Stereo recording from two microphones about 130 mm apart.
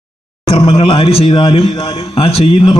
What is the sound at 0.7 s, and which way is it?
A man's voice, 50° left (ahead or behind).